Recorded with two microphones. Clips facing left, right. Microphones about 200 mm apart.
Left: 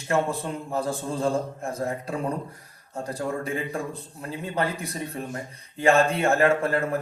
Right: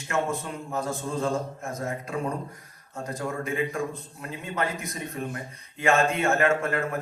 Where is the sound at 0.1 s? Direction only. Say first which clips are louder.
Left 3 dB; 35° left (ahead or behind).